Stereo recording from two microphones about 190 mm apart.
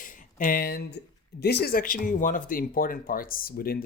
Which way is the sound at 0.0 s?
45° left (ahead or behind).